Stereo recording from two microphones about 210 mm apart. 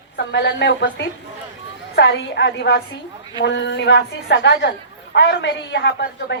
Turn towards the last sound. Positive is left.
turn(degrees=55)  # may be behind; listen again after turning